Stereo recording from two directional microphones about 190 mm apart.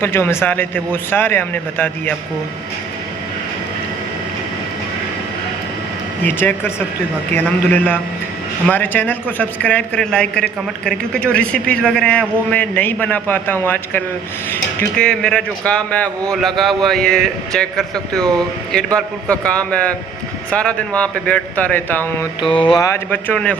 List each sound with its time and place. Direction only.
0.0 s a man's voice: 10° left (ahead or behind)
6.2 s a man's voice: 10° left (ahead or behind)
22.6 s speech: 20° left (ahead or behind)
23.1 s a man's voice: 10° left (ahead or behind)